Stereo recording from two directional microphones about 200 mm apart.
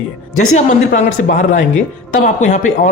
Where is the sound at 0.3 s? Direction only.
40° left (ahead or behind).